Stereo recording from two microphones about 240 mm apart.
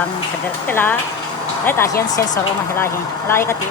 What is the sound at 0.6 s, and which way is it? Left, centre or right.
Speech, centre.